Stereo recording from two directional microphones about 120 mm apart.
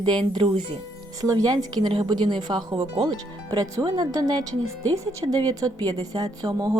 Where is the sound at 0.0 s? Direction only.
40° right (ahead or behind).